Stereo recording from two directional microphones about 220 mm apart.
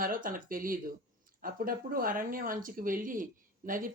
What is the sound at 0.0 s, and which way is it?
Speech, 40° right (ahead or behind).